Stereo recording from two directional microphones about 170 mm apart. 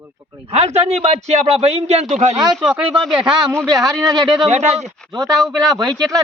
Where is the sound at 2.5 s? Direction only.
5° right (ahead or behind).